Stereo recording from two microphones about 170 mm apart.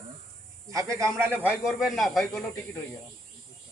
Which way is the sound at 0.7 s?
20° right (ahead or behind).